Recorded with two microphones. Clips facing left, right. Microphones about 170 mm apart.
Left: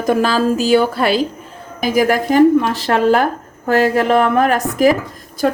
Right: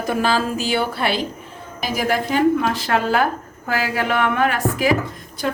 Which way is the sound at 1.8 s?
50° left (ahead or behind).